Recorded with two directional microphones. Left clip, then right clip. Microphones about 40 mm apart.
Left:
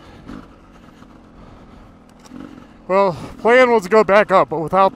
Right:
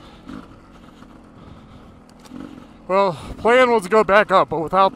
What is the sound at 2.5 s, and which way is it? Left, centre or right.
Speech, left.